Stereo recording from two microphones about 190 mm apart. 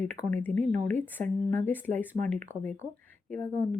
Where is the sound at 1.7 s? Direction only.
10° left (ahead or behind).